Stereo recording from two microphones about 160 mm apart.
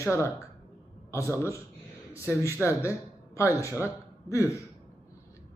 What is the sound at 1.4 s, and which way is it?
A man's voice, 20° left (ahead or behind).